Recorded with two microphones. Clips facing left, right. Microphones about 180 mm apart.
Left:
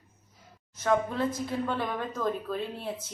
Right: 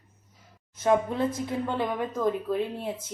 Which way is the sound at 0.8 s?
20° right (ahead or behind).